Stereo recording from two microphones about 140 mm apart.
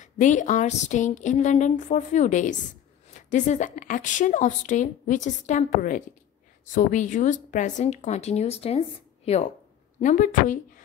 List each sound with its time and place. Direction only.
0.0 s a woman's voice: 60° left (ahead or behind)
9.9 s a woman's voice: 65° left (ahead or behind)